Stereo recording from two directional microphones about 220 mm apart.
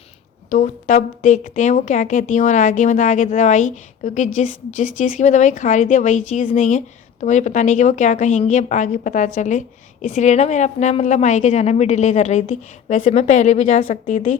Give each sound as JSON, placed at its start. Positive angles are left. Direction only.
{"t": 0.5, "sound": "a woman's voice", "side_deg": 35}